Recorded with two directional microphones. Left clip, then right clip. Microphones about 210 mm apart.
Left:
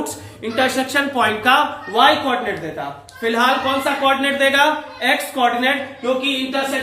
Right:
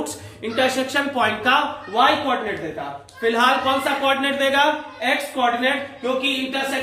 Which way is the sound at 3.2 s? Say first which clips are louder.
Left 1 dB; centre (ahead or behind).